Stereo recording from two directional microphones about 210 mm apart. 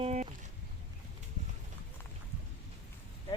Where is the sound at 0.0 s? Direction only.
30° right (ahead or behind).